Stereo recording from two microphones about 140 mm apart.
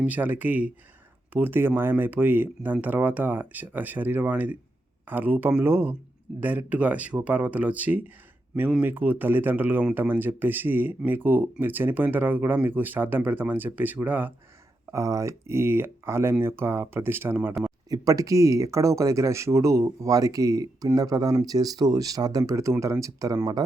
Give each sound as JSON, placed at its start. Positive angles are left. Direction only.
{"t": 0.0, "sound": "speech", "side_deg": -10}
{"t": 14.9, "sound": "speech", "side_deg": -25}
{"t": 17.8, "sound": "speech", "side_deg": -25}